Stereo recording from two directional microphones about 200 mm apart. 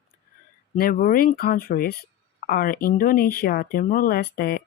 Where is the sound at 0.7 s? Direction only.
45° left (ahead or behind).